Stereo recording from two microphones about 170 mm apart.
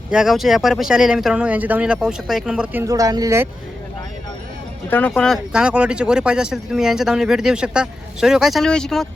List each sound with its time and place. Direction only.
0.1 s speech: 5° right (ahead or behind)
2.8 s speech: 20° right (ahead or behind)
4.9 s speech: 10° left (ahead or behind)